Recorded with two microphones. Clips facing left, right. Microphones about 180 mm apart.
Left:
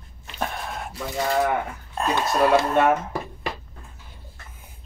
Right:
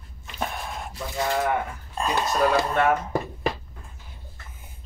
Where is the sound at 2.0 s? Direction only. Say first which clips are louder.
Left 2 dB; 5° left (ahead or behind).